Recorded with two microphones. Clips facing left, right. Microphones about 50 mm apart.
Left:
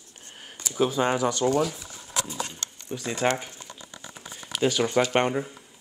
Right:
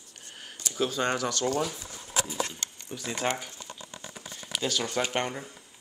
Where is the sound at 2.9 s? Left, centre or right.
Centre.